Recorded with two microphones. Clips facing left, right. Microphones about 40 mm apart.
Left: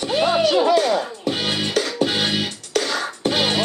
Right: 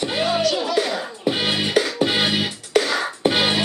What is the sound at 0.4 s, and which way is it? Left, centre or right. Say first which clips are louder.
Music: left 5 dB; left.